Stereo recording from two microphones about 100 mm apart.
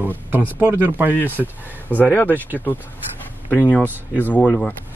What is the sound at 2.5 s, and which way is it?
Speech, 20° left (ahead or behind).